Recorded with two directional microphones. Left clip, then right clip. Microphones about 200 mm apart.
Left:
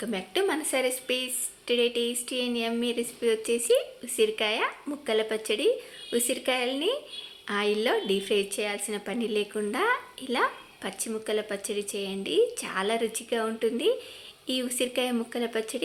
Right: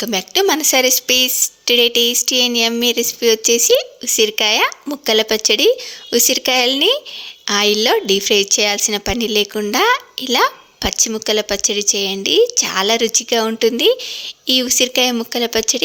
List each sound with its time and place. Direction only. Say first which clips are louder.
0.0 s a woman's voice: right 12 dB; 50° right (ahead or behind)